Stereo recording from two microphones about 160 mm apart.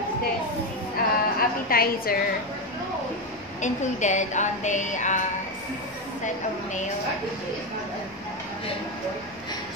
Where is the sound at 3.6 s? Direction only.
50° left (ahead or behind).